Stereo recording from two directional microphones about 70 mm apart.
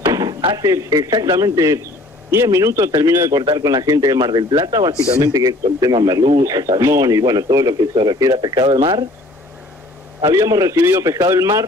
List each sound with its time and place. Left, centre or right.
0.1 s speech: right
3.3 s speech: right
5.2 s speech: right
7.1 s speech: right
10.3 s speech: right
10.8 s a man's voice: right
11.1 s speech: right